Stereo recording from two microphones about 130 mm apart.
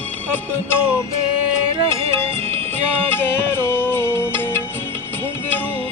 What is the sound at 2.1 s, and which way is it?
Music, 20° left (ahead or behind).